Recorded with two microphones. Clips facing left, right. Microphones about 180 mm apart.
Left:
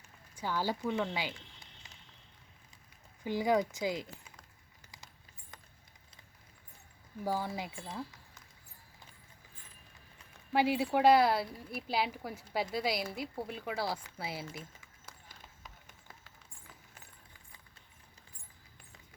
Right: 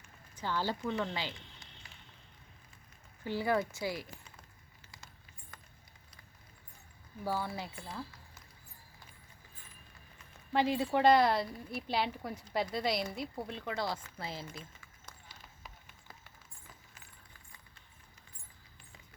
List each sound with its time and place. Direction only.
0.3 s speech: 10° left (ahead or behind)
3.2 s speech: 15° left (ahead or behind)
5.5 s a sound: 20° left (ahead or behind)
7.3 s speech: 15° left (ahead or behind)
10.5 s a woman's voice: 10° left (ahead or behind)